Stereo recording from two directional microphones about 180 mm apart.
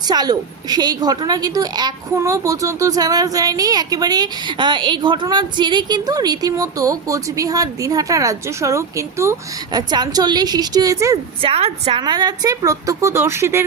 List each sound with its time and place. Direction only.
0.1 s a woman's voice: 20° right (ahead or behind)
11.4 s a woman's voice: 35° right (ahead or behind); by 13.7 s 15° right (ahead or behind)